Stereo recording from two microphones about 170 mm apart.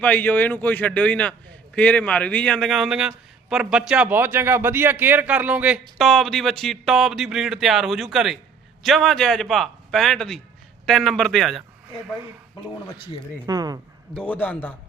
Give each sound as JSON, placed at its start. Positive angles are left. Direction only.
{"t": 0.0, "sound": "a man's voice", "side_deg": 10}
{"t": 13.5, "sound": "speech", "side_deg": -20}
{"t": 14.1, "sound": "a man's voice", "side_deg": 5}